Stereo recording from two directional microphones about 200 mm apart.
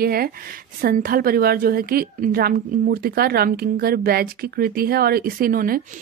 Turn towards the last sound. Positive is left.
turn(degrees=-45)  # may be behind; listen again after turning